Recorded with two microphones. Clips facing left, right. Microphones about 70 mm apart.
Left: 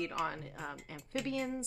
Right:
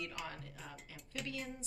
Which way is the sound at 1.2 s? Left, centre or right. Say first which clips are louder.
Left 8 dB; left.